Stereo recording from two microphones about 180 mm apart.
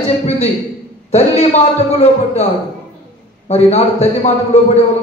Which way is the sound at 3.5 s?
35° left (ahead or behind).